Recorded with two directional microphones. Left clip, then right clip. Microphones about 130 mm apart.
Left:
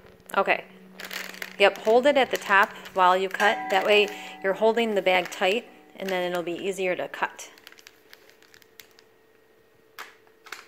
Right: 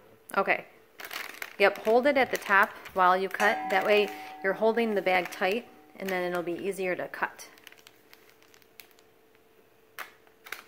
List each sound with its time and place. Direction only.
0.3 s speech: 5° left (ahead or behind)
9.9 s computer keyboard: 20° right (ahead or behind)